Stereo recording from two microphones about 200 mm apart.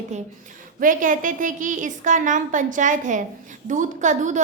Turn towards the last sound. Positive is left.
turn(degrees=-40)  # may be behind; listen again after turning